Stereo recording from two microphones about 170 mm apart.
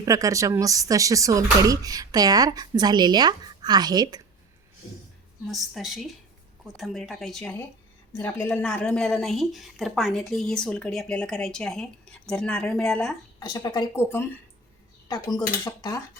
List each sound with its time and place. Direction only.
0.0 s speech: 20° right (ahead or behind)
5.5 s a woman's voice: centre (ahead or behind)
13.4 s speech: 25° left (ahead or behind)
15.0 s speech: 25° left (ahead or behind)